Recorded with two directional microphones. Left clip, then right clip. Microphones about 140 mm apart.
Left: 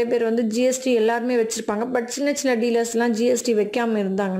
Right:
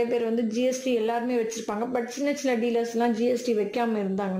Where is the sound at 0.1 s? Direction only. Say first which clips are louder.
Left 5 dB; 25° left (ahead or behind).